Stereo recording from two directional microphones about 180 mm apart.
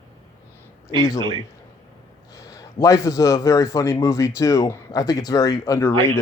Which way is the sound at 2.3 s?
20° left (ahead or behind).